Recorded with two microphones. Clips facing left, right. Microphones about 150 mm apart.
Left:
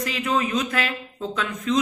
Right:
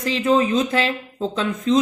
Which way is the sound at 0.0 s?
30° right (ahead or behind).